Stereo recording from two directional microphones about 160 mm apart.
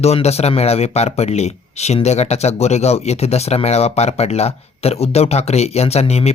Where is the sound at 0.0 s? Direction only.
40° left (ahead or behind).